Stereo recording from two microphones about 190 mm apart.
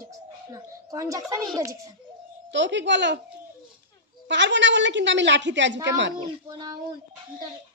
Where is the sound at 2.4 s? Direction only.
70° right (ahead or behind).